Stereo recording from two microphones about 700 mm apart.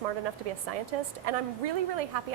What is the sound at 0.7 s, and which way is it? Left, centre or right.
A woman's voice, right.